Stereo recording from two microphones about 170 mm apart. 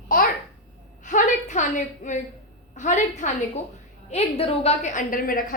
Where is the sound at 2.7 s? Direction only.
45° left (ahead or behind).